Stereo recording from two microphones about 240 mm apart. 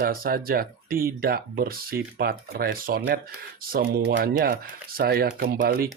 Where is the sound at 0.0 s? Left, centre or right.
Right.